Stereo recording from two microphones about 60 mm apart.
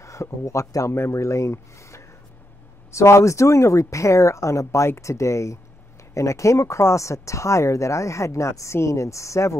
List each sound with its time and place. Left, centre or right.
0.0 s speech: left